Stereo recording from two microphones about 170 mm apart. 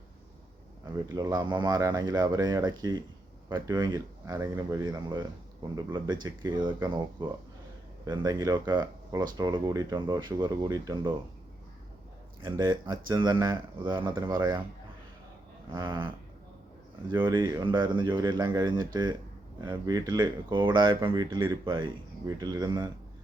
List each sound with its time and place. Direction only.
0.9 s speech: 20° right (ahead or behind)
12.4 s speech: 25° right (ahead or behind)
15.7 s speech: 25° right (ahead or behind)